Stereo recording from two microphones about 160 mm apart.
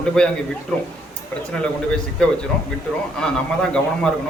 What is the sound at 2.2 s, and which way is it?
A man's voice, 5° left (ahead or behind).